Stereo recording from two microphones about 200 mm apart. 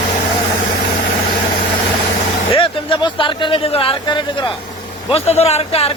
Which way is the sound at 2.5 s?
25° left (ahead or behind).